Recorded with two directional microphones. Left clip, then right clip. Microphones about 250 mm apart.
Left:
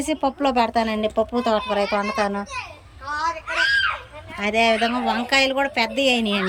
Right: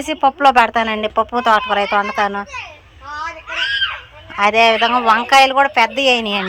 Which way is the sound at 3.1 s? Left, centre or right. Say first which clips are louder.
Left 1 dB; right.